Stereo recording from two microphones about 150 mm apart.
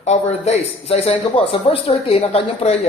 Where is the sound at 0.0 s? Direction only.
45° left (ahead or behind).